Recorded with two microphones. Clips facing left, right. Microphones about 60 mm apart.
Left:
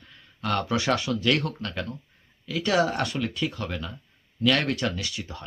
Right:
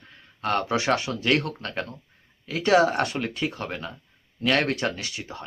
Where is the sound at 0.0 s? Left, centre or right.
Right.